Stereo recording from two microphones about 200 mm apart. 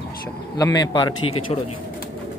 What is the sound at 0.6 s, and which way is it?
Speech, 20° left (ahead or behind).